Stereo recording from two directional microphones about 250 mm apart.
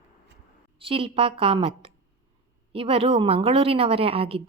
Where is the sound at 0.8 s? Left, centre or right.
Right.